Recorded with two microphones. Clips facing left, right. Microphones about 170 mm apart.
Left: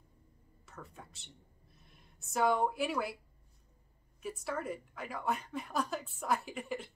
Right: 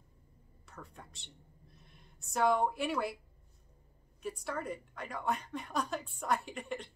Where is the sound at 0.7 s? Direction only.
Centre (ahead or behind).